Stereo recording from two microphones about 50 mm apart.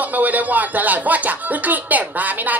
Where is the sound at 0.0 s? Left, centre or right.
Right.